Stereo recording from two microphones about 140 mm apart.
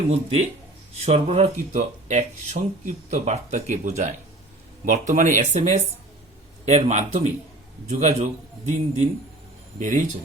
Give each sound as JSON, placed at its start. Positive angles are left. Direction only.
{"t": 0.1, "sound": "speech", "side_deg": -50}